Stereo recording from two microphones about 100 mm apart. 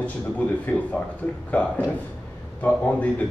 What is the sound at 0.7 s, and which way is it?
Speech, 15° left (ahead or behind).